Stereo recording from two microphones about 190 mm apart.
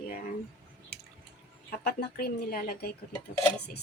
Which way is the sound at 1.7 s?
55° left (ahead or behind).